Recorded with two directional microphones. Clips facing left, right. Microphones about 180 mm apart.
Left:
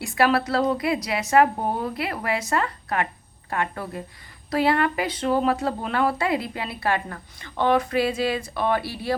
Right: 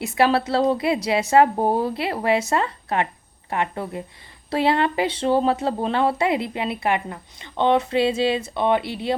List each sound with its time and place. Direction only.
0.0 s speech: 25° right (ahead or behind)